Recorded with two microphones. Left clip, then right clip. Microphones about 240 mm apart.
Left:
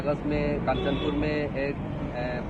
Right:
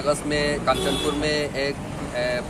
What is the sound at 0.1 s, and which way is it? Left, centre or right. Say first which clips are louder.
Speech: right 5 dB; right.